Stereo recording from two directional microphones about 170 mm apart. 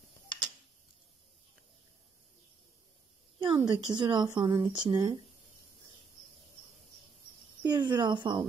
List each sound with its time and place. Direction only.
3.3 s speech: 30° right (ahead or behind)
7.6 s speech: 25° right (ahead or behind)